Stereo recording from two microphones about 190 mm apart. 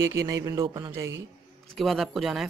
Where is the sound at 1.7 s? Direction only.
Centre (ahead or behind).